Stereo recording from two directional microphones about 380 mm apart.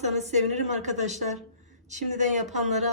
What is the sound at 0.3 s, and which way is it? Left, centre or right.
A woman's voice, centre.